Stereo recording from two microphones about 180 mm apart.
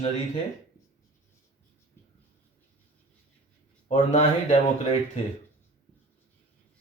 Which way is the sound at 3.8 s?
40° left (ahead or behind).